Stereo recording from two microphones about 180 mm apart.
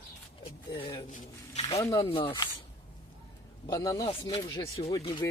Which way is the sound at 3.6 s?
20° left (ahead or behind).